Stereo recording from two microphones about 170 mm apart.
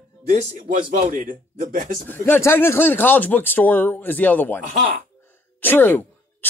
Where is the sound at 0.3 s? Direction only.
45° right (ahead or behind).